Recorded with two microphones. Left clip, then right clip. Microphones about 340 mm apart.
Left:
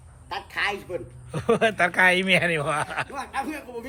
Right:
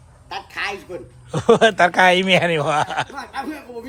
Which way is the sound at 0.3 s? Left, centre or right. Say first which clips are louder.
Right 1 dB; centre.